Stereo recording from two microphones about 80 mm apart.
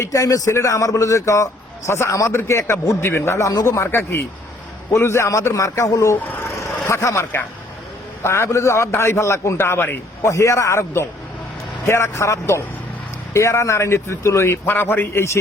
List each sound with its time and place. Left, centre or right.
0.0 s speech: left
10.2 s speech: left